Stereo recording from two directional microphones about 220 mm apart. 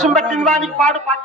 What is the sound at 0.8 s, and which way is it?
Speech, 35° right (ahead or behind).